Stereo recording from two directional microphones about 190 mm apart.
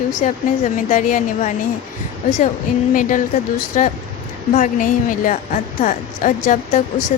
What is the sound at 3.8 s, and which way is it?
Speech, 40° left (ahead or behind).